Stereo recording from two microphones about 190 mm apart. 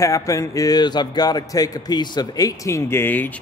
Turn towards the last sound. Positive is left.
turn(degrees=10)  # may be behind; listen again after turning